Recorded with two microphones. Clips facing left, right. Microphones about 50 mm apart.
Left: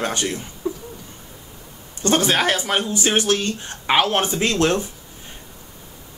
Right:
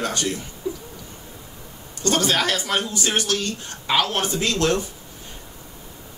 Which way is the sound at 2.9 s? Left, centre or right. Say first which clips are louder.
Left 4 dB; left.